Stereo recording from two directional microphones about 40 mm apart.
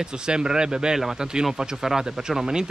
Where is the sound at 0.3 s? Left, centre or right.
Right.